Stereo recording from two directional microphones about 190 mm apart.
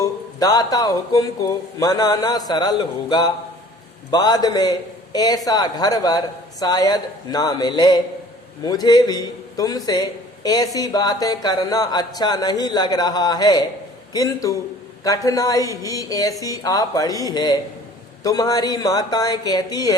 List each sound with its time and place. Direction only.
0.0 s a man's voice: 20° left (ahead or behind)